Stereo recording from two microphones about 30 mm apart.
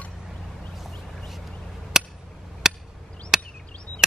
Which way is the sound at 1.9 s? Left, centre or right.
Centre.